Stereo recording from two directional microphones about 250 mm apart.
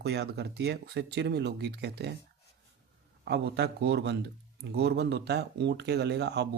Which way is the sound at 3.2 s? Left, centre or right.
Right.